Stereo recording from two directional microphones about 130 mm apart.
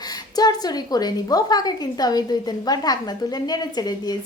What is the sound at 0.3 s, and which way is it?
A woman's voice, 30° left (ahead or behind).